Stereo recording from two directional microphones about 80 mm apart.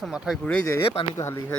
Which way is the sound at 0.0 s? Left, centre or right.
Centre.